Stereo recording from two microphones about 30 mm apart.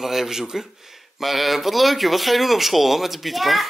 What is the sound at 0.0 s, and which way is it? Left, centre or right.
Speech, centre.